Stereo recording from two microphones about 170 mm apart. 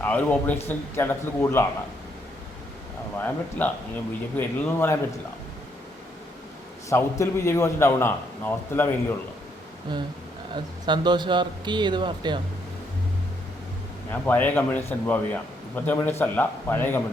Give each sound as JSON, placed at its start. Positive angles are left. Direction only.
{"t": 0.0, "sound": "a man's voice", "side_deg": 10}
{"t": 3.2, "sound": "a man's voice", "side_deg": 10}
{"t": 6.9, "sound": "a man's voice", "side_deg": 15}
{"t": 10.5, "sound": "speech", "side_deg": -25}
{"t": 14.1, "sound": "a man's voice", "side_deg": 10}